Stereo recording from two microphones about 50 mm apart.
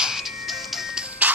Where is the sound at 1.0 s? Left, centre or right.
Right.